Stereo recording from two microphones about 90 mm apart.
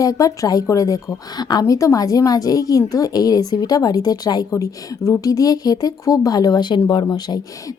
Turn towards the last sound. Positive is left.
turn(degrees=50)  # may be behind; listen again after turning